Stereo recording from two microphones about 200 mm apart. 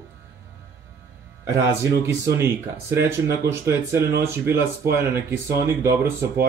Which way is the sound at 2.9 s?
15° right (ahead or behind).